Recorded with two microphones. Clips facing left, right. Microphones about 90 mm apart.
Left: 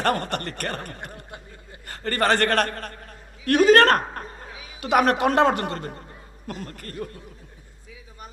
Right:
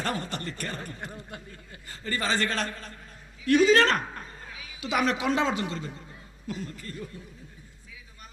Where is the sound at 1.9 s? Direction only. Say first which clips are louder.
Left 7 dB; 60° left (ahead or behind).